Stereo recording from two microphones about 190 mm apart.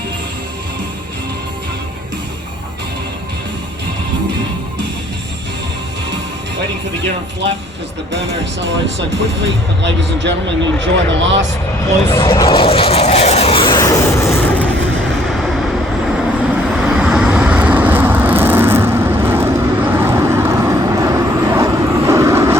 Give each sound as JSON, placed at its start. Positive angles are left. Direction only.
{"t": 9.4, "sound": "speech", "side_deg": -70}
{"t": 12.0, "sound": "vehicle", "side_deg": 25}
{"t": 15.3, "sound": "vehicle", "side_deg": 0}
{"t": 16.8, "sound": "vehicle", "side_deg": -5}